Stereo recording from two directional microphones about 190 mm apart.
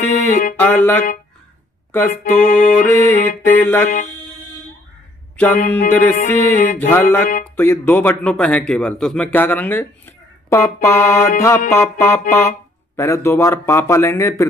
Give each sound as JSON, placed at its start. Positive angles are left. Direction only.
{"t": 0.1, "sound": "music", "side_deg": 45}
{"t": 0.6, "sound": "a man's voice", "side_deg": 10}
{"t": 2.3, "sound": "music", "side_deg": 45}
{"t": 3.4, "sound": "a man's voice", "side_deg": 10}
{"t": 5.4, "sound": "a man's voice", "side_deg": 10}
{"t": 6.1, "sound": "music", "side_deg": 40}
{"t": 6.9, "sound": "a man's voice", "side_deg": 10}